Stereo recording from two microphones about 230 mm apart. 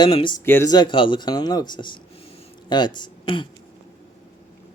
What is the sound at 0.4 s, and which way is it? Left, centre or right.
Speech, centre.